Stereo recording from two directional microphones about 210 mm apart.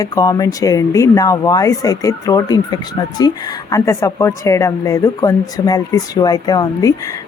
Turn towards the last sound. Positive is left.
turn(degrees=15)  # may be behind; listen again after turning